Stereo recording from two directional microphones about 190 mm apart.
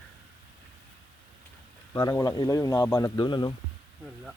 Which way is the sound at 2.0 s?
20° left (ahead or behind).